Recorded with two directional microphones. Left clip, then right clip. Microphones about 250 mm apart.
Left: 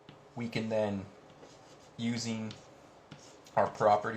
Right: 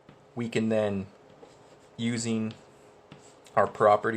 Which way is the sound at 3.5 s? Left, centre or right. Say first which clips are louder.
Right 5 dB; right.